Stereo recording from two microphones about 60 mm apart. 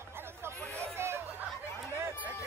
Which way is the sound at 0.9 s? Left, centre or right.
Right.